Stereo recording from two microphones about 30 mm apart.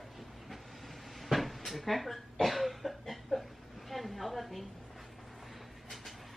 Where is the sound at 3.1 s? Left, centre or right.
Centre.